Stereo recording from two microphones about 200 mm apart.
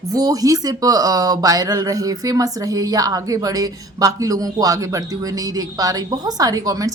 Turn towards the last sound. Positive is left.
turn(degrees=-15)  # may be behind; listen again after turning